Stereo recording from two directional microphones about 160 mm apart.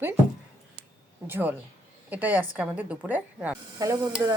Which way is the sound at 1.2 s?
10° right (ahead or behind).